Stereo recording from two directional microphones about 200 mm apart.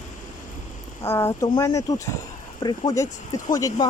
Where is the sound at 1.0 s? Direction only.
15° left (ahead or behind).